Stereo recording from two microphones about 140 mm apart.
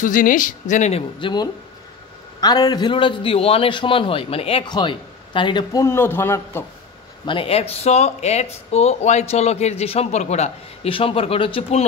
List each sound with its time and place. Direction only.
0.0 s speech: 70° left (ahead or behind)
1.2 s a man's voice: 30° left (ahead or behind)
7.2 s speech: 40° left (ahead or behind)